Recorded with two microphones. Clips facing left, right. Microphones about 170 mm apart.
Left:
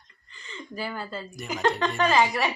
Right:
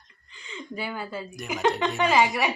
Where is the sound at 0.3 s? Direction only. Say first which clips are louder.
Right 2 dB; 15° right (ahead or behind).